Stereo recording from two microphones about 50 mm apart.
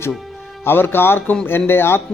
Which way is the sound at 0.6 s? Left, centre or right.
Left.